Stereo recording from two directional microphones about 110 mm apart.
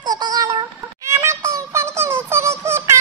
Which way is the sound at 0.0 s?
40° right (ahead or behind).